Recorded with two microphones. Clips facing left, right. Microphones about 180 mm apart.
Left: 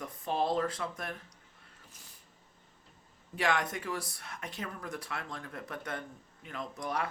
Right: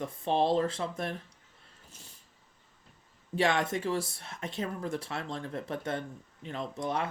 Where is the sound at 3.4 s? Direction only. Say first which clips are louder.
Right 4 dB; 25° right (ahead or behind).